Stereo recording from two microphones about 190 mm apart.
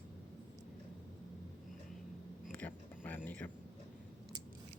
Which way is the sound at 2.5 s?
10° left (ahead or behind).